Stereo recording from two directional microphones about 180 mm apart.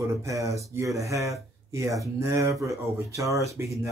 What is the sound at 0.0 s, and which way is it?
Speech, 15° right (ahead or behind).